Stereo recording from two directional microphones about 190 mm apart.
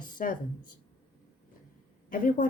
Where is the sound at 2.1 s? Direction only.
45° left (ahead or behind).